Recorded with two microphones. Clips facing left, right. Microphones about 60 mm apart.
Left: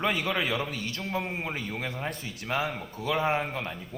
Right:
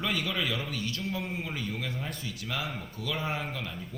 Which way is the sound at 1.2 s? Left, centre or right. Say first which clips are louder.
Left 2 dB; left.